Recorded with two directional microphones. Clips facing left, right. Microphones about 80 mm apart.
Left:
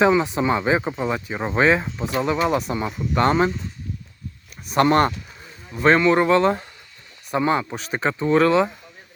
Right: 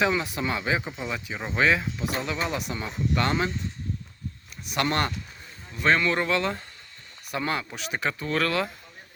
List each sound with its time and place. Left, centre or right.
0.1 s speech: left
0.8 s speech: left
4.6 s speech: left
7.7 s speech: left